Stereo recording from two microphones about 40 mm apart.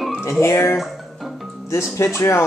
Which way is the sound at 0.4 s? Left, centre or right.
Left.